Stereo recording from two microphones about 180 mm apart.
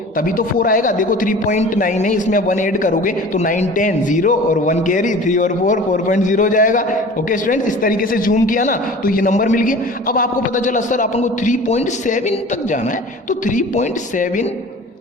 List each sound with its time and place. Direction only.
0.2 s speech: 50° left (ahead or behind)
13.4 s speech: 45° left (ahead or behind)